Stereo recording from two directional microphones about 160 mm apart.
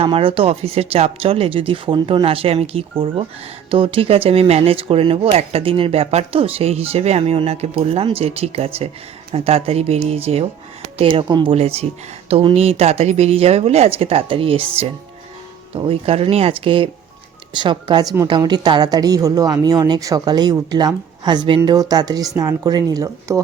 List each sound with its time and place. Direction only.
0.0 s speech: 35° right (ahead or behind)
11.5 s a woman's voice: 40° right (ahead or behind); by 23.4 s 25° right (ahead or behind)